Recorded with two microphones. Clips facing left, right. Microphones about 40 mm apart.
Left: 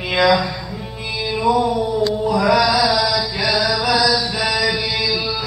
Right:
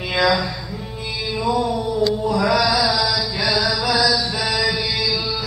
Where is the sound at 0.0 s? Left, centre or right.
Centre.